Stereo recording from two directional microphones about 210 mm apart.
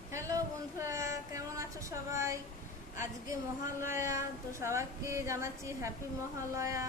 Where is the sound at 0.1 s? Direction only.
15° right (ahead or behind).